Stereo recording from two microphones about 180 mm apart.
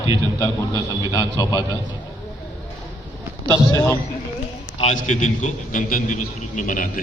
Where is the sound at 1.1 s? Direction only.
20° left (ahead or behind).